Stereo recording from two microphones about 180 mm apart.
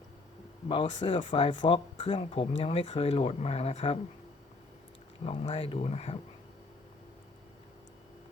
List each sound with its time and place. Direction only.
0.7 s speech: 30° left (ahead or behind)
5.2 s speech: 30° left (ahead or behind)